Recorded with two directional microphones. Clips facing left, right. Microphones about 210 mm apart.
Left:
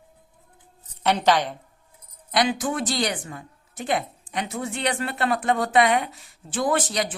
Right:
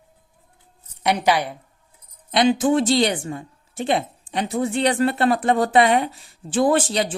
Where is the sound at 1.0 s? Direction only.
15° right (ahead or behind).